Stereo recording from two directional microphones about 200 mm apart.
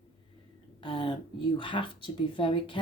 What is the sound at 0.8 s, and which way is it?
Speech, 25° left (ahead or behind).